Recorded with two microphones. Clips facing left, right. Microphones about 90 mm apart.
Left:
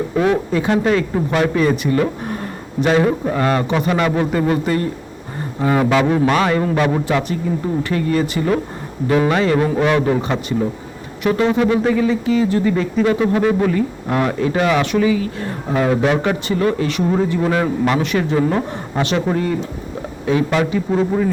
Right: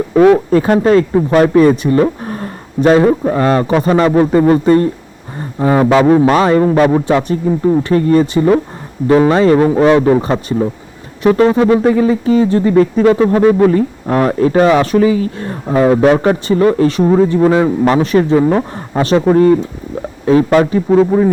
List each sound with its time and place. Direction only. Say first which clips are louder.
0.1 s speech: right 10 dB; 55° right (ahead or behind)
0.5 s speech: right 7 dB; 40° right (ahead or behind)